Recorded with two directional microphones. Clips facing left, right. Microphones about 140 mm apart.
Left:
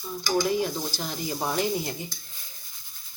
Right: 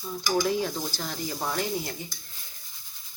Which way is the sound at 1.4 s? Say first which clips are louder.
Left 3 dB; 20° left (ahead or behind).